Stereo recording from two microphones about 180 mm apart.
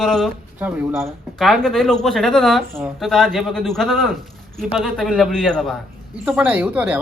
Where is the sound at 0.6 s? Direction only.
10° right (ahead or behind).